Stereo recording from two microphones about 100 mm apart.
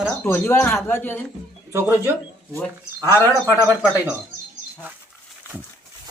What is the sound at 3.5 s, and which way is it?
Speech, 15° right (ahead or behind).